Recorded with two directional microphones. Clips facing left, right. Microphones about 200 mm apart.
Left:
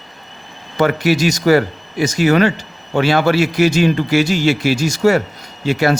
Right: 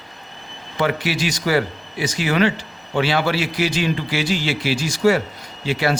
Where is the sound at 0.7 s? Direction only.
45° left (ahead or behind).